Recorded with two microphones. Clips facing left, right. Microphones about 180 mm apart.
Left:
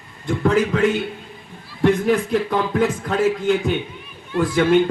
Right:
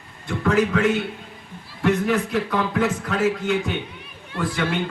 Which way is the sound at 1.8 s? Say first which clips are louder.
Left 4 dB; 40° left (ahead or behind).